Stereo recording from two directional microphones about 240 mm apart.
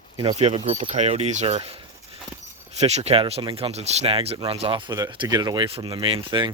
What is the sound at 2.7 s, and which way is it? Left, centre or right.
Speech, right.